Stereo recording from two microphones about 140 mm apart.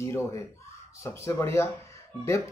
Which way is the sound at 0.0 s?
20° left (ahead or behind).